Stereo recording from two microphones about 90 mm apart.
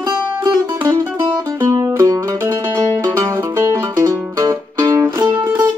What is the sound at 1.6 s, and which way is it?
Mandolin, 40° right (ahead or behind).